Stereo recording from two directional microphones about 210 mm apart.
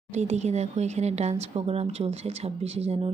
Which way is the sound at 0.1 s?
35° right (ahead or behind).